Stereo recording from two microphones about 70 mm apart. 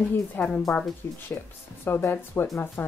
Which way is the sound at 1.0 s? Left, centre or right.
Left.